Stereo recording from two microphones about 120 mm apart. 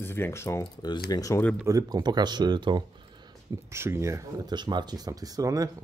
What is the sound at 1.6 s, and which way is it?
A man's voice, 25° right (ahead or behind).